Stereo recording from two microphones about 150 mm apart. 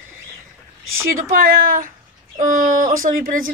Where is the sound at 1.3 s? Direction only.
75° right (ahead or behind).